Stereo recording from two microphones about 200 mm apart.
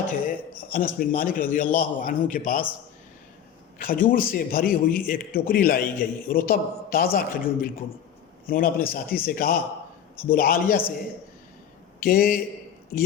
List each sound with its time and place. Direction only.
0.1 s a man's voice: 45° left (ahead or behind)
3.8 s a man's voice: 45° left (ahead or behind)
11.9 s a man's voice: 45° left (ahead or behind)